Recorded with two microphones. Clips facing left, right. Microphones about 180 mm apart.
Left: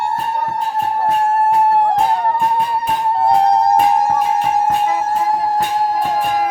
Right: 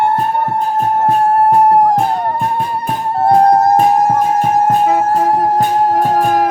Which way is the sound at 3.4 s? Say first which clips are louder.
Right 5 dB; 50° right (ahead or behind).